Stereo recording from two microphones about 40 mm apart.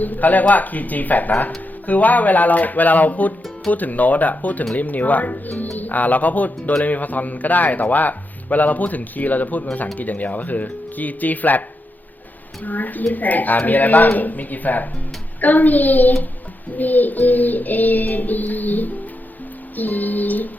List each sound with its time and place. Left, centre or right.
0.0 s speech: left
12.6 s speech: left